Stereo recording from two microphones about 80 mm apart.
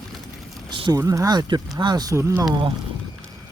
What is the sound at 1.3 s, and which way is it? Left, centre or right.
Speech, right.